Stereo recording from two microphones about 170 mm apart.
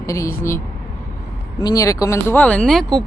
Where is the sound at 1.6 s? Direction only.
20° left (ahead or behind); by 3.0 s centre (ahead or behind).